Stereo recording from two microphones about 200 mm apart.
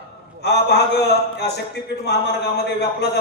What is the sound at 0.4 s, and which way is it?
A man's voice, 55° left (ahead or behind).